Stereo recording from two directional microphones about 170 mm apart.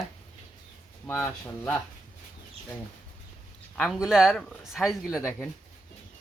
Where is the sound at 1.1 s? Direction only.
10° left (ahead or behind).